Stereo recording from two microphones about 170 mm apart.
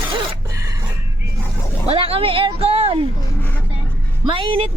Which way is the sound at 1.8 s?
35° right (ahead or behind).